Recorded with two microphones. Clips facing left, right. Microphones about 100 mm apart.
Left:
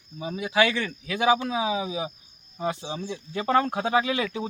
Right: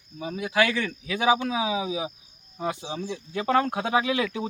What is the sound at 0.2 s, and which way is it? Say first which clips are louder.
Speech: left 1 dB; 5° left (ahead or behind).